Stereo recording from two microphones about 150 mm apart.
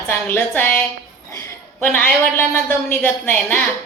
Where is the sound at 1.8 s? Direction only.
10° left (ahead or behind).